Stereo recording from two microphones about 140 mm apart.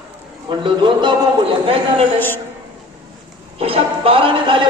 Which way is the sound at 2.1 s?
15° left (ahead or behind).